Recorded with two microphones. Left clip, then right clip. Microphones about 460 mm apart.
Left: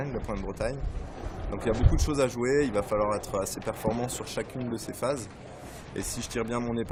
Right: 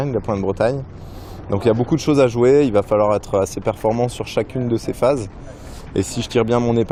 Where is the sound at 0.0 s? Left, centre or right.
Right.